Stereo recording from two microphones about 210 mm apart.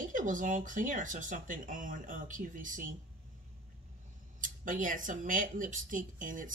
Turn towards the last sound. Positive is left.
turn(degrees=-40)  # may be behind; listen again after turning